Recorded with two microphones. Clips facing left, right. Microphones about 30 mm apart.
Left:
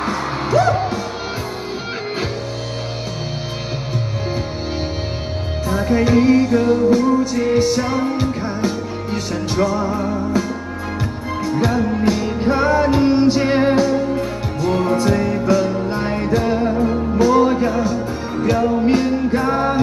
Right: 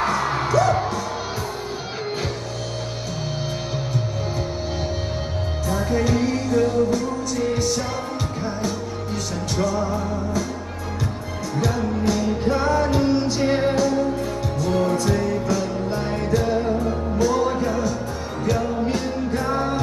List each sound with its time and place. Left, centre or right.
0.0 s music: left
5.7 s music: left
11.4 s music: left